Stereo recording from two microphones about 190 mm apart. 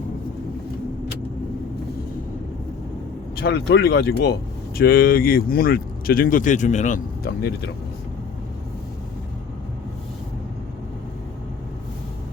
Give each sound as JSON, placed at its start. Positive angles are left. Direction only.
{"t": 3.4, "sound": "speech", "side_deg": 55}
{"t": 7.3, "sound": "speech", "side_deg": 60}